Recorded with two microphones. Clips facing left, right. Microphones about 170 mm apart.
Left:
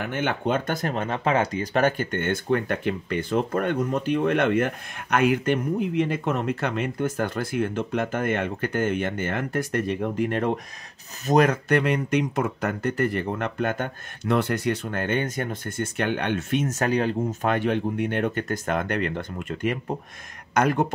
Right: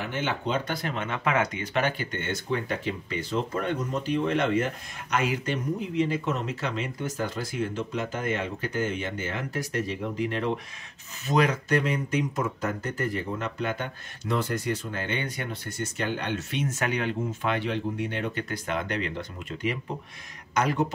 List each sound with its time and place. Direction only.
0.0 s speech: 55° left (ahead or behind)